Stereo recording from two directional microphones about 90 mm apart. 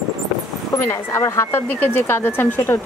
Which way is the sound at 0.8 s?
30° left (ahead or behind).